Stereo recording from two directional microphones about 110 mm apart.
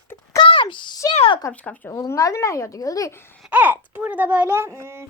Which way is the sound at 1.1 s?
60° left (ahead or behind).